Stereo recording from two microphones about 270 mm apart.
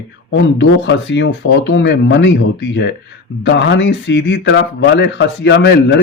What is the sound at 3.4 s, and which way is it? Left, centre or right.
Speech, left.